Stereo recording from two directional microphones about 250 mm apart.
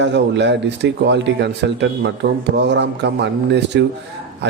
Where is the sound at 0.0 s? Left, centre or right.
Right.